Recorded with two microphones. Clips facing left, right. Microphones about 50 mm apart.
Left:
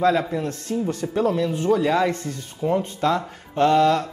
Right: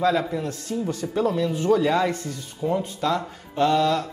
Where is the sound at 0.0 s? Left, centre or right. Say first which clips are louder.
Left 2 dB; left.